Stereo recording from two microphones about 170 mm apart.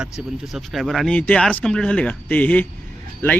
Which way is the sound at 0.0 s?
Centre (ahead or behind).